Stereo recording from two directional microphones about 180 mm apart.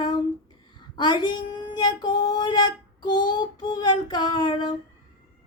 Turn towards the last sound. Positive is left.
turn(degrees=25)  # may be behind; listen again after turning